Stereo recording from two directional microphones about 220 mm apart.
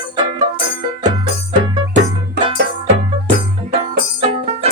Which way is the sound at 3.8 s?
25° right (ahead or behind).